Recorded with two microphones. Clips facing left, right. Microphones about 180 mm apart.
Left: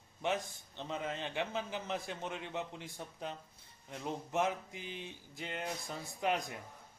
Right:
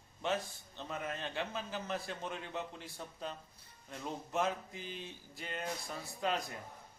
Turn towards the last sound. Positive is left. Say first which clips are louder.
# left 2 dB
turn(degrees=15)  # may be behind; listen again after turning